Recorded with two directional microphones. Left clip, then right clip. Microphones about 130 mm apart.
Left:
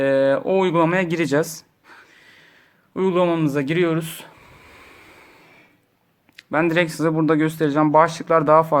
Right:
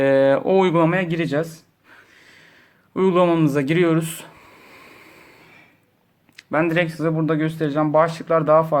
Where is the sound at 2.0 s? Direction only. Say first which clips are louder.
Right 2 dB; 20° left (ahead or behind).